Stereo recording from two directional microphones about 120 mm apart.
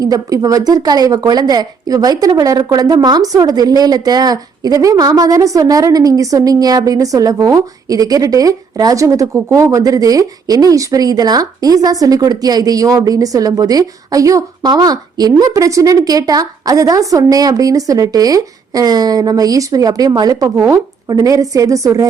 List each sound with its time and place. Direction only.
0.0 s a woman's voice: 30° right (ahead or behind)